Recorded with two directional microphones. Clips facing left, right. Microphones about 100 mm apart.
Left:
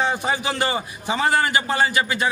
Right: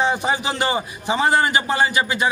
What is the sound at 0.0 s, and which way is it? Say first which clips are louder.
A man's voice: right 2 dB; 20° right (ahead or behind).